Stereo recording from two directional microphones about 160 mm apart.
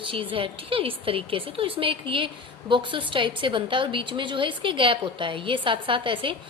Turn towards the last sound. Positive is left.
turn(degrees=-30)  # may be behind; listen again after turning